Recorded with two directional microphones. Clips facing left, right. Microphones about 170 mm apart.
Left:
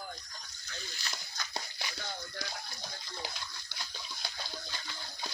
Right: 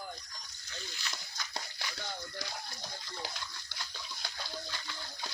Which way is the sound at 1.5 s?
20° left (ahead or behind).